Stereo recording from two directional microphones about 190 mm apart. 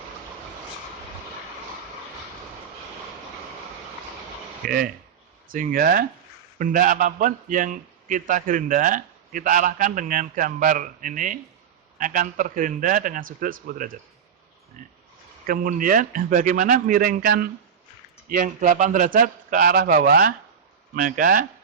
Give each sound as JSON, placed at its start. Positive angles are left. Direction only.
{"t": 4.6, "sound": "a man's voice", "side_deg": -50}
{"t": 15.4, "sound": "a man's voice", "side_deg": -45}